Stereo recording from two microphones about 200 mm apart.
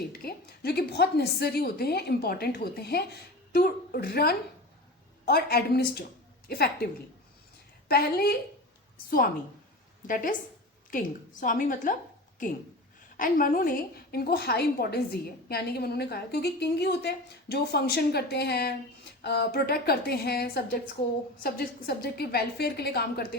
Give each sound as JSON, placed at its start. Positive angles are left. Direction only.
{"t": 0.1, "sound": "a woman's voice", "side_deg": 50}
{"t": 7.9, "sound": "a woman's voice", "side_deg": 50}